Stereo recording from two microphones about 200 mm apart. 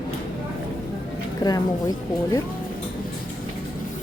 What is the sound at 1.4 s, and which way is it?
Speech, 20° left (ahead or behind).